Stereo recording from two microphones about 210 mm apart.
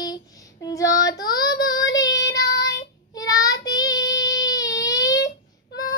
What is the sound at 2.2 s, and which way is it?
Child singing, 55° left (ahead or behind).